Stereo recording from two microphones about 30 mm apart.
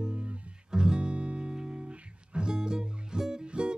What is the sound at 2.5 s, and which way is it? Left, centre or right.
Music, right.